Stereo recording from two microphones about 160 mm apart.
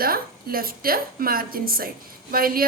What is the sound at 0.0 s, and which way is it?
Speech, 65° right (ahead or behind).